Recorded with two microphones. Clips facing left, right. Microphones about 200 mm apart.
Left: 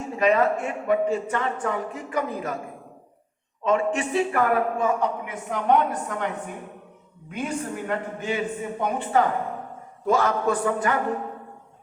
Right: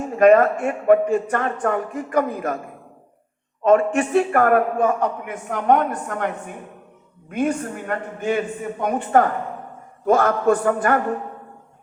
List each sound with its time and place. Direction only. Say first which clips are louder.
0.0 s a man's voice: right 7 dB; 50° right (ahead or behind)
3.6 s a man's voice: right 6 dB; 55° right (ahead or behind)